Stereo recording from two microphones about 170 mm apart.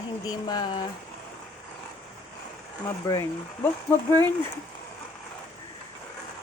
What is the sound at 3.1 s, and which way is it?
Speech, 15° left (ahead or behind).